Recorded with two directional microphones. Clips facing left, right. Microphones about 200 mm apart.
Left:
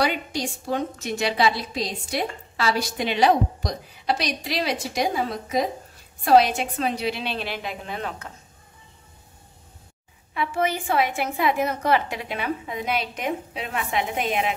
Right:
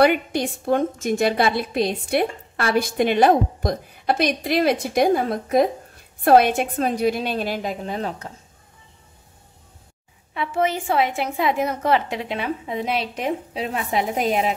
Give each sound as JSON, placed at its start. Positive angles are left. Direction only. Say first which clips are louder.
{"t": 0.0, "sound": "a woman's voice", "louder": "right 7 dB", "side_deg": -55}
{"t": 10.3, "sound": "a woman's voice", "louder": "right 2 dB", "side_deg": -25}